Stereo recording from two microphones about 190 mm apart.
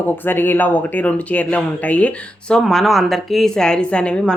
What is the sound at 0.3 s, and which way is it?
Speech, 10° left (ahead or behind).